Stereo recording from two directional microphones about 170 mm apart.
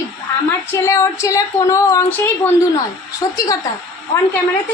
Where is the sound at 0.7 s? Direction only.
15° left (ahead or behind).